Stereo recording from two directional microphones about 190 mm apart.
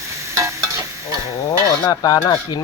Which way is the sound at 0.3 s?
15° right (ahead or behind).